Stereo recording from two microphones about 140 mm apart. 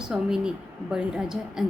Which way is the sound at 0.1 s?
5° right (ahead or behind).